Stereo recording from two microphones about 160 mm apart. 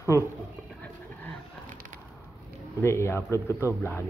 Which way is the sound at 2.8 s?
15° left (ahead or behind).